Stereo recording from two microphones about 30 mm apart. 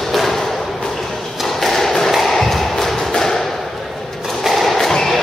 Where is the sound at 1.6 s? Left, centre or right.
Centre.